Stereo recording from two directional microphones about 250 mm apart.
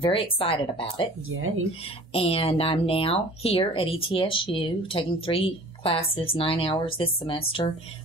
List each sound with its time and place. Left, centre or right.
0.0 s speech: left
1.3 s speech: right
2.1 s speech: left